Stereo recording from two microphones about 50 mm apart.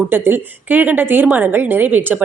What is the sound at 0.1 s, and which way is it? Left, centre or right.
A woman's voice, right.